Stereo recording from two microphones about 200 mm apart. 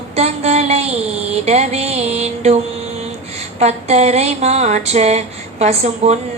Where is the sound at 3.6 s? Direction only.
35° right (ahead or behind).